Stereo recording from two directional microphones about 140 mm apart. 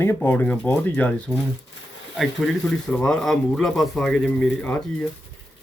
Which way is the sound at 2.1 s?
5° left (ahead or behind).